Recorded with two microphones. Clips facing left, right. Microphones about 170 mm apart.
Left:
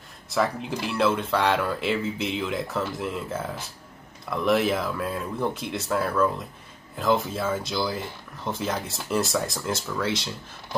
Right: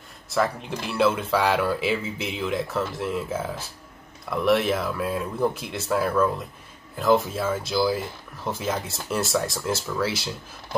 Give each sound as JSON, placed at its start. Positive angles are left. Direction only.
{"t": 0.3, "sound": "speech", "side_deg": 0}